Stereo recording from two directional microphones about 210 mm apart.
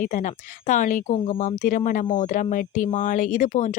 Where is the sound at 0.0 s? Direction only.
35° left (ahead or behind).